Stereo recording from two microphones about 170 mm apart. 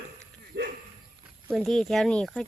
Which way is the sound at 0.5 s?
80° right.